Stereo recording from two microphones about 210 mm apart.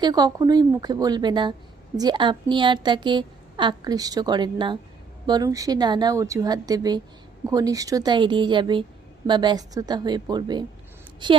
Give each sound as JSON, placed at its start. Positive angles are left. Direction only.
{"t": 0.0, "sound": "a woman's voice", "side_deg": -20}